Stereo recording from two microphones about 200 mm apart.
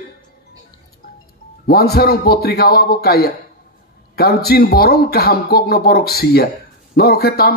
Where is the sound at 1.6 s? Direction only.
50° left (ahead or behind).